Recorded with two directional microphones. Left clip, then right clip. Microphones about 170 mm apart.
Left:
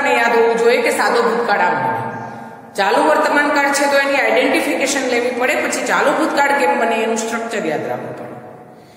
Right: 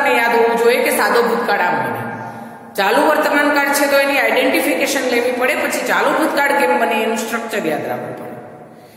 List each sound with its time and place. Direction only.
0.0 s a woman's voice: centre (ahead or behind)
2.8 s a woman's voice: 15° right (ahead or behind)